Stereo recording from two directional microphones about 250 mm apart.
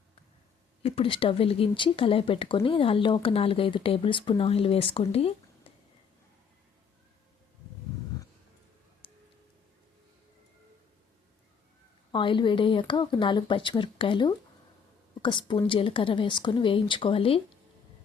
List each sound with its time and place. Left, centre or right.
0.8 s speech: left
9.0 s a sound: left
12.1 s speech: centre